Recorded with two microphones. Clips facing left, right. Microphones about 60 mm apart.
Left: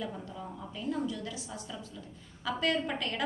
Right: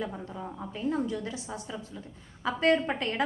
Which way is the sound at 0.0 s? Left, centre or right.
Right.